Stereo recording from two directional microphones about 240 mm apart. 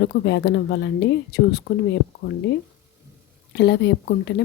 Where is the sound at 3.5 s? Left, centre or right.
Left.